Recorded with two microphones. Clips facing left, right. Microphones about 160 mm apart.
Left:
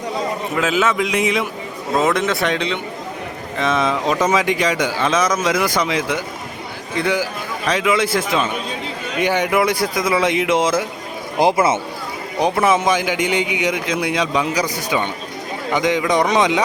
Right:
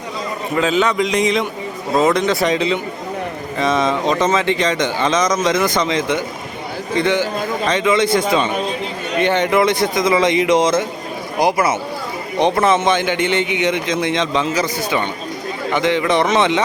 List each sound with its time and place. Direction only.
0.5 s a man's voice: 5° left (ahead or behind)
11.4 s speech: 25° left (ahead or behind)
12.4 s a man's voice: 5° left (ahead or behind)